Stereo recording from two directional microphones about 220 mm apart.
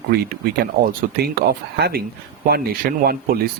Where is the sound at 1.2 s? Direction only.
45° right (ahead or behind).